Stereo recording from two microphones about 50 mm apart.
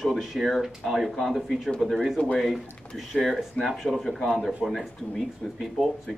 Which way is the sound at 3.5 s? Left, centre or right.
Centre.